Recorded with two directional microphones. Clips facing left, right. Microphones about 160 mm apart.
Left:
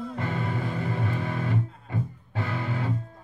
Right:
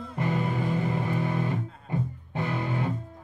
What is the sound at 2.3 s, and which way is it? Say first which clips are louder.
Music: right 1 dB; 20° right (ahead or behind).